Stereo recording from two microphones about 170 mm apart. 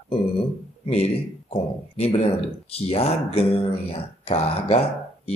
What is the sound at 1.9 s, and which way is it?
Speech, 35° left (ahead or behind).